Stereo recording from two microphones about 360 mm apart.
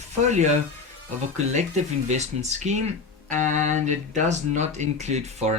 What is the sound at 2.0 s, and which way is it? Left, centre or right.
Speech, centre.